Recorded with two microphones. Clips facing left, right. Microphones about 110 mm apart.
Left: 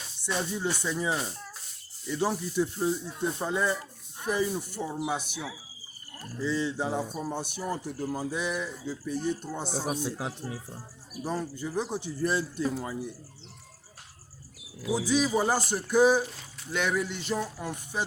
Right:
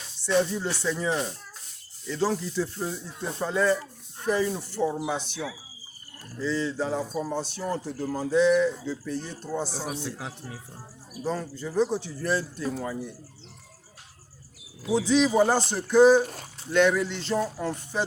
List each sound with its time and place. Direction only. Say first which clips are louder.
0.2 s speech: right 6 dB; 15° left (ahead or behind)
14.9 s speech: right 5 dB; 5° left (ahead or behind)
16.2 s speech: right 5 dB; 50° right (ahead or behind)
16.7 s speech: right 7 dB; 5° left (ahead or behind)